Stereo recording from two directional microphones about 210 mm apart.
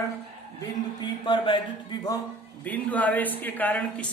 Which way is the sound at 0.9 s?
20° left (ahead or behind).